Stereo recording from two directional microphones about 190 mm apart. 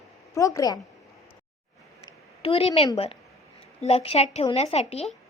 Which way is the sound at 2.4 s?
30° left (ahead or behind).